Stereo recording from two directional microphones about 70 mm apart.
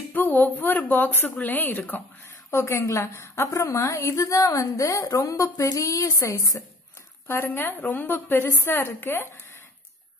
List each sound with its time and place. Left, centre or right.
0.1 s a woman's voice: left
2.5 s a woman's voice: left
7.2 s a woman's voice: left